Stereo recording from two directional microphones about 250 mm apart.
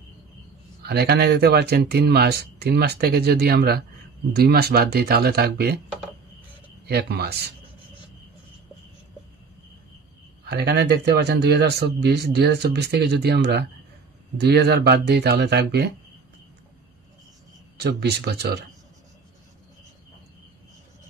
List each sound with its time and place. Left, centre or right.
0.8 s speech: right
6.9 s speech: right
10.4 s speech: right
17.7 s speech: right